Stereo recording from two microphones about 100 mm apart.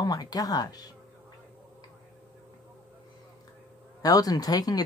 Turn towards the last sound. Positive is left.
turn(degrees=40)  # may be behind; listen again after turning